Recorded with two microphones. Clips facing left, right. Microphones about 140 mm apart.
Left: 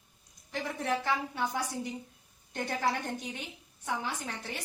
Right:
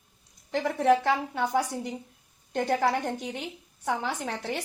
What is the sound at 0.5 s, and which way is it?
A woman's voice, 65° right (ahead or behind).